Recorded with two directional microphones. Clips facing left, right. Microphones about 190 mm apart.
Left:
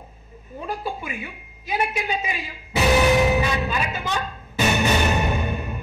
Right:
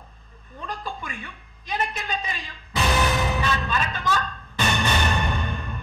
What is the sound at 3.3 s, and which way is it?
Music, 10° left (ahead or behind).